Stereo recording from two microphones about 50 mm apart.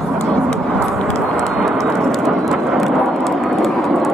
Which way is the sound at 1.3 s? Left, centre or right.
Centre.